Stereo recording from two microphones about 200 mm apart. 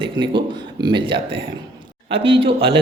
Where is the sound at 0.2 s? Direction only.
20° right (ahead or behind).